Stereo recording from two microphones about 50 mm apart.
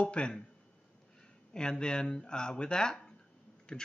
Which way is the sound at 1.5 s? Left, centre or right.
Centre.